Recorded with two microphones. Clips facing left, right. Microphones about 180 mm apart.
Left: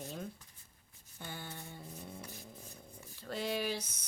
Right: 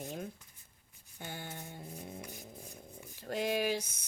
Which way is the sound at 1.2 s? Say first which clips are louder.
Right 2 dB; 45° right (ahead or behind).